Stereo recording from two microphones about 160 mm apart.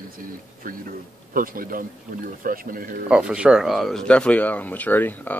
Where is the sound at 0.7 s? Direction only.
60° right (ahead or behind).